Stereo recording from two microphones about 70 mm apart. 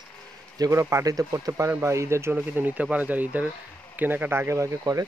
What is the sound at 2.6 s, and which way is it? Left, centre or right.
Speech, right.